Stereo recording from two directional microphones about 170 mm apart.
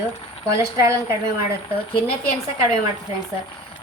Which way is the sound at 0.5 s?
15° right (ahead or behind).